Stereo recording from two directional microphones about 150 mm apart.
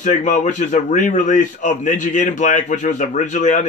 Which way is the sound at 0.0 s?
55° left (ahead or behind).